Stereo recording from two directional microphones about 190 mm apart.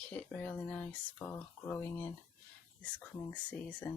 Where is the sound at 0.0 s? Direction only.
5° left (ahead or behind).